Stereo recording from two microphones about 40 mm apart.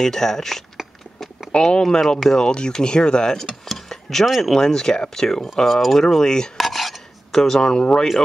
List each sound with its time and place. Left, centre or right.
0.0 s speech: centre
1.5 s speech: left
1.8 s speech: centre
3.7 s a sound: centre
4.4 s speech: centre
5.8 s speech: centre
6.0 s speech: centre
6.5 s cutlery: centre
7.3 s speech: centre